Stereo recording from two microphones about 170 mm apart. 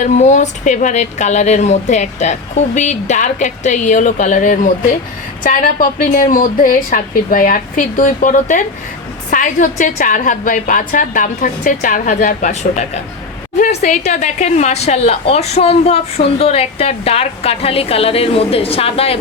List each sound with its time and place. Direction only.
0.0 s speech: 45° left (ahead or behind)
13.8 s a woman's voice: 45° left (ahead or behind)